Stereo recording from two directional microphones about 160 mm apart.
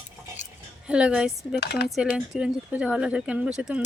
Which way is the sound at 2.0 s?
5° right (ahead or behind).